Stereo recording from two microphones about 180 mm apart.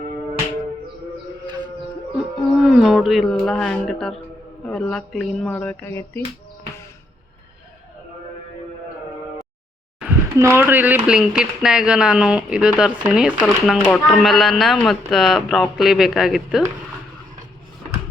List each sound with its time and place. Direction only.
1.5 s a sound: 25° right (ahead or behind)
2.1 s speech: 5° right (ahead or behind); by 6.2 s 15° left (ahead or behind)
10.3 s speech: 15° right (ahead or behind)